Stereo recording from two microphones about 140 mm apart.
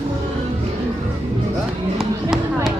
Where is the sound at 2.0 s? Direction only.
Centre (ahead or behind).